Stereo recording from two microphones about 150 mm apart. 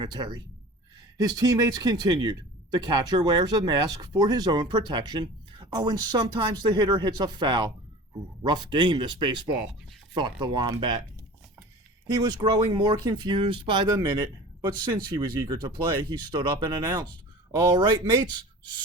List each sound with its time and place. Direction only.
0.0 s speech: 30° right (ahead or behind)
12.0 s speech: 30° right (ahead or behind)
13.9 s speech: 15° right (ahead or behind)
17.7 s speech: 30° right (ahead or behind)